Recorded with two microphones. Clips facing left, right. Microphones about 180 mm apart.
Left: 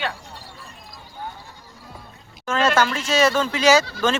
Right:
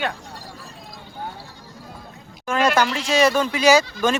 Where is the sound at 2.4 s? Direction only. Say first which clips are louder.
Even; 15° right (ahead or behind).